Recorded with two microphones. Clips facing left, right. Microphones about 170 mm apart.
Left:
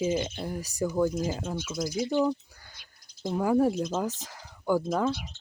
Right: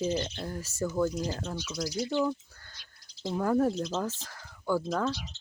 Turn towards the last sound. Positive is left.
turn(degrees=10)  # may be behind; listen again after turning